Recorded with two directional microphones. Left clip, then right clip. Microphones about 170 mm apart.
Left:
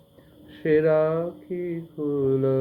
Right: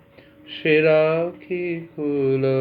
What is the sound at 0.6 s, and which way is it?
Speech, 35° right (ahead or behind).